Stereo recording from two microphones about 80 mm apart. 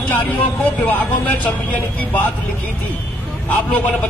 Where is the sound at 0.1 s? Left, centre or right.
Left.